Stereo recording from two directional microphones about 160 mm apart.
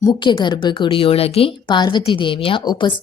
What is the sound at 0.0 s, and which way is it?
A woman's voice, 25° left (ahead or behind).